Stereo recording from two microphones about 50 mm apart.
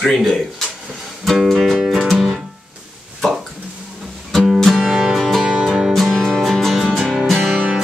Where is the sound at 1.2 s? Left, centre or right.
Centre.